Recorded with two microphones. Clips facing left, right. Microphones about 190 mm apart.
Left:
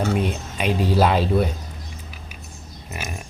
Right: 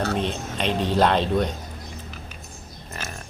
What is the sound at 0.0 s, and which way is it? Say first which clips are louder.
Speech: left 2 dB; 10° left (ahead or behind).